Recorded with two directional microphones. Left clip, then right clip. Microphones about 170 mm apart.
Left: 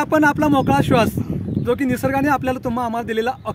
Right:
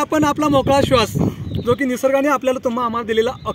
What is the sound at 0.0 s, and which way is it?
Speech, 15° left (ahead or behind).